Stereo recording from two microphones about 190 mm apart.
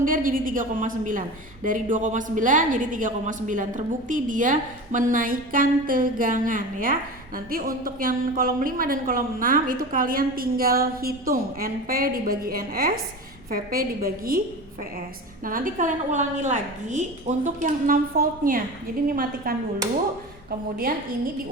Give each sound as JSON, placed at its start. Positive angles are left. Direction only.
{"t": 0.0, "sound": "speech", "side_deg": -45}
{"t": 15.4, "sound": "speech", "side_deg": -45}